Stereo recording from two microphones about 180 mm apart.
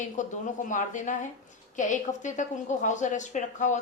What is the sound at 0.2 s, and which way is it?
A woman's voice, 45° left (ahead or behind).